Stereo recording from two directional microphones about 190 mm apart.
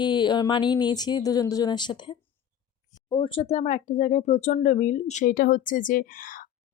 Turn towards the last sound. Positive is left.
turn(degrees=45)  # may be behind; listen again after turning